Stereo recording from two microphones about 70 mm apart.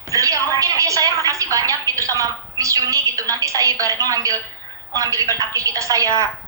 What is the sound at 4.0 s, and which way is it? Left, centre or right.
Speech, right.